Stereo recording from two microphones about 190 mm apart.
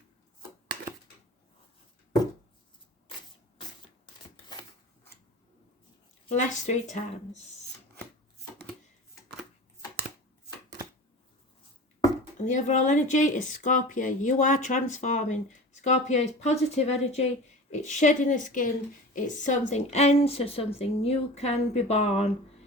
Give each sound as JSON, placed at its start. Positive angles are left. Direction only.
{"t": 6.2, "sound": "speech", "side_deg": 40}
{"t": 12.5, "sound": "speech", "side_deg": 40}